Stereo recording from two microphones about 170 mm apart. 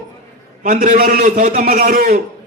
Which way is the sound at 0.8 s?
55° right (ahead or behind).